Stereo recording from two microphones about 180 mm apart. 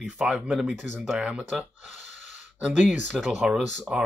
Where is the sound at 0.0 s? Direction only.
5° right (ahead or behind).